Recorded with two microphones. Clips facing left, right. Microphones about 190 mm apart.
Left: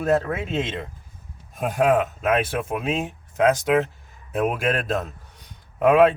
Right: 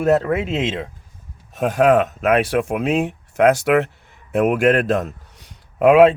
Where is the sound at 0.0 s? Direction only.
70° right (ahead or behind).